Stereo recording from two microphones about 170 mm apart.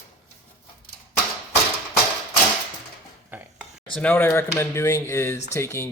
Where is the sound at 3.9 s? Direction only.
10° left (ahead or behind).